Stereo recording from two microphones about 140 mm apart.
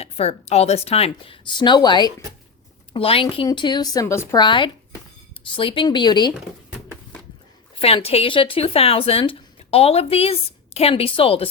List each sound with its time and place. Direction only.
0.0 s speech: 50° left (ahead or behind); by 2.0 s 30° left (ahead or behind)
2.9 s speech: 40° left (ahead or behind)
4.0 s a woman's voice: 20° left (ahead or behind)
4.4 s speech: 35° left (ahead or behind)
7.8 s speech: 45° left (ahead or behind)